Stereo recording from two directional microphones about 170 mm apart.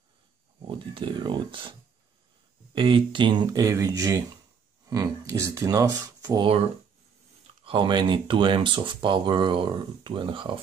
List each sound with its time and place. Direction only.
0.6 s speech: 30° right (ahead or behind)
7.6 s speech: 30° right (ahead or behind)